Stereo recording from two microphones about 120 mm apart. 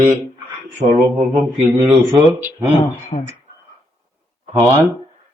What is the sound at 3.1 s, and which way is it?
Speech, 60° left (ahead or behind).